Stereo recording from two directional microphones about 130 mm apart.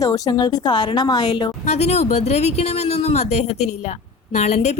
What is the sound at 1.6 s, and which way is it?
Speech, 60° left (ahead or behind).